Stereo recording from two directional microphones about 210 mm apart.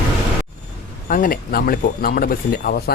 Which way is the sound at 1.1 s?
45° left (ahead or behind).